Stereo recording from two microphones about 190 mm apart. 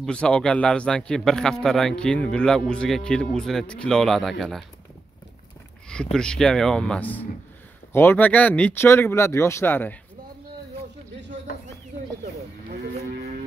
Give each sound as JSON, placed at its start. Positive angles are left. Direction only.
{"t": 0.0, "sound": "a man's voice", "side_deg": 5}
{"t": 6.1, "sound": "a man's voice", "side_deg": 5}